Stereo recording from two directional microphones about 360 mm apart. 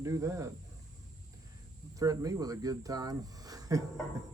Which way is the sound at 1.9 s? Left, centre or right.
Centre.